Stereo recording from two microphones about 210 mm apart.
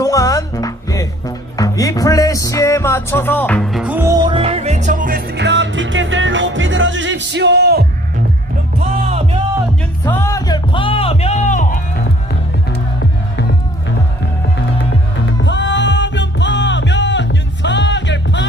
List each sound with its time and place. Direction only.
0.0 s music: 15° left (ahead or behind); by 7.9 s 50° right (ahead or behind)
8.8 s music: 30° right (ahead or behind)
10.0 s music: 10° left (ahead or behind); by 11.8 s 35° left (ahead or behind)
15.4 s music: 60° left (ahead or behind)